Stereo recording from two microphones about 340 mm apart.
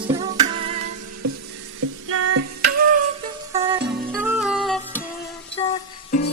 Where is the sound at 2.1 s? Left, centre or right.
Right.